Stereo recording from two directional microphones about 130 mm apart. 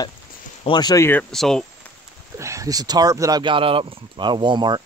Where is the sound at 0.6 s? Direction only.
35° left (ahead or behind).